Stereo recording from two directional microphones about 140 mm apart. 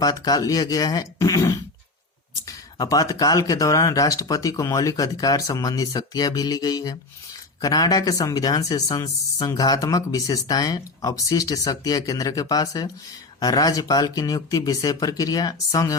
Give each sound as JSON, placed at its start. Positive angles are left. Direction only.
{"t": 0.0, "sound": "speech", "side_deg": 25}